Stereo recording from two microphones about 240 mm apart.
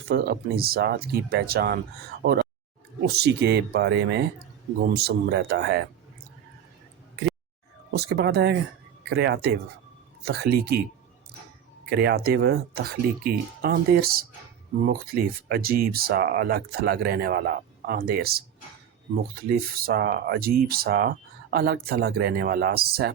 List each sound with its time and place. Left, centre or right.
0.1 s speech: right
7.9 s speech: right
11.9 s speech: right